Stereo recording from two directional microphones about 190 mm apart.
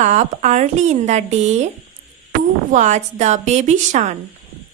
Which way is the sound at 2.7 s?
40° right (ahead or behind).